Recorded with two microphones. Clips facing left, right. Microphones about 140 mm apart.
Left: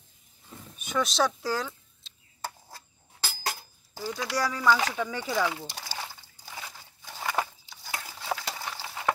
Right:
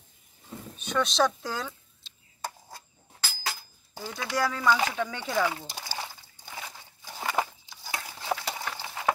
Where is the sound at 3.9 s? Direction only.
5° left (ahead or behind).